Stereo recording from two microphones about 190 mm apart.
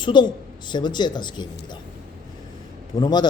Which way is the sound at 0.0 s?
25° left (ahead or behind).